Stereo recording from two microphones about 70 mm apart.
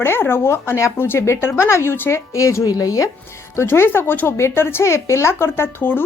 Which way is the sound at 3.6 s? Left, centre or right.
Left.